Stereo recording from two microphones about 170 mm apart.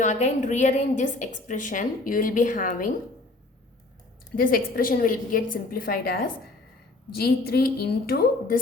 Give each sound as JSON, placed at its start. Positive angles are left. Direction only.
{"t": 0.0, "sound": "a woman's voice", "side_deg": 45}
{"t": 4.4, "sound": "a woman's voice", "side_deg": 55}